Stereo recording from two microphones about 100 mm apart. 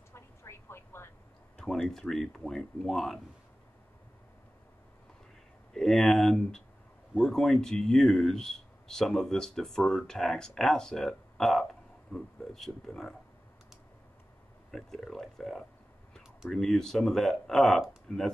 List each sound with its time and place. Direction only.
0.1 s vehicle: 25° left (ahead or behind)
1.6 s speech: 5° left (ahead or behind)
5.7 s speech: 5° left (ahead or behind)
14.7 s speech: 5° left (ahead or behind)